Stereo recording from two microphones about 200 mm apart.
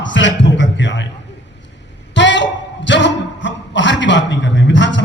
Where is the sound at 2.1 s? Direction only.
65° left (ahead or behind).